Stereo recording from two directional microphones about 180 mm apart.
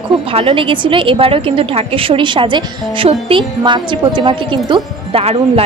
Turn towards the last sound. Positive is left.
turn(degrees=-35)  # may be behind; listen again after turning